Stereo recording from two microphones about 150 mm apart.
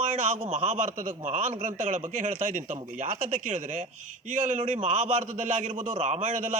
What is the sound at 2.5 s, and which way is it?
Speech, 60° right (ahead or behind).